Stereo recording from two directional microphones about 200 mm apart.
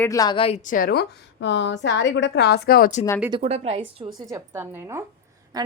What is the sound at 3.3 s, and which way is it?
Speech, 30° right (ahead or behind).